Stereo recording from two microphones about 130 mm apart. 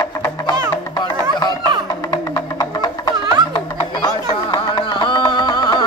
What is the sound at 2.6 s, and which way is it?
Music, 30° left (ahead or behind).